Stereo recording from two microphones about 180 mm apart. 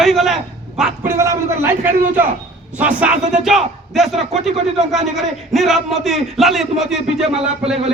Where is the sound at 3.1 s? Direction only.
45° right (ahead or behind).